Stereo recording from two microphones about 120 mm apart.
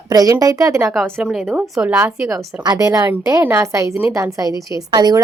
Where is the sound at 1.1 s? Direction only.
10° right (ahead or behind).